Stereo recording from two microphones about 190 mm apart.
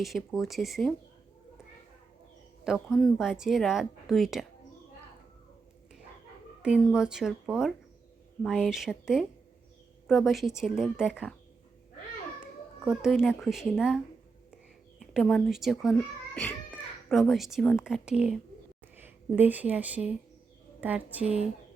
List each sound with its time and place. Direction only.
0.0 s a woman's voice: centre (ahead or behind)
2.6 s a woman's voice: centre (ahead or behind)
6.6 s a woman's voice: 5° right (ahead or behind)
12.8 s a woman's voice: 5° right (ahead or behind)